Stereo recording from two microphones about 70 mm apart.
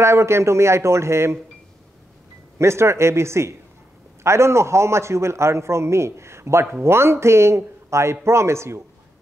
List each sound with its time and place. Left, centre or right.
0.0 s speech: right
2.6 s a man's voice: right